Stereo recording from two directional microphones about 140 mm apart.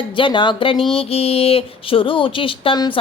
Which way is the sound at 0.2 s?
35° left (ahead or behind).